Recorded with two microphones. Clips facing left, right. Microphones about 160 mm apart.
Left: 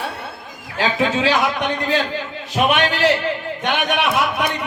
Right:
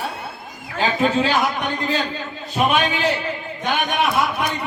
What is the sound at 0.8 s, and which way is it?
A man's voice, 90° left.